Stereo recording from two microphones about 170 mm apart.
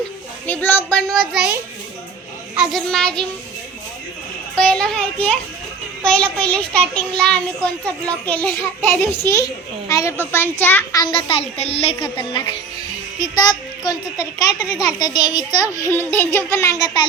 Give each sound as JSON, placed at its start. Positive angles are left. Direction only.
{"t": 0.4, "sound": "a child's voice", "side_deg": 10}
{"t": 2.6, "sound": "a child's voice", "side_deg": 0}
{"t": 4.5, "sound": "a child's voice", "side_deg": 5}
{"t": 11.0, "sound": "music", "side_deg": 30}
{"t": 13.1, "sound": "speech", "side_deg": 25}